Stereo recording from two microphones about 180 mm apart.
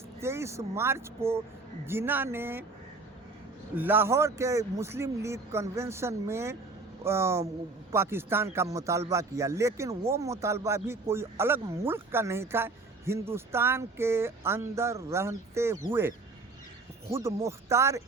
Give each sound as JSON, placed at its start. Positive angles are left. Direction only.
{"t": 0.2, "sound": "speech", "side_deg": -15}
{"t": 3.8, "sound": "speech", "side_deg": -10}